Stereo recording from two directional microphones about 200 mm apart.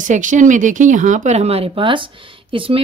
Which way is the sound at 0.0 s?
40° right (ahead or behind).